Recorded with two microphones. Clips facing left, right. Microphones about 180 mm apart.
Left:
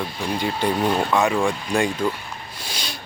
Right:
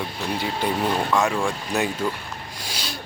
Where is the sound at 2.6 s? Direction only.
10° right (ahead or behind).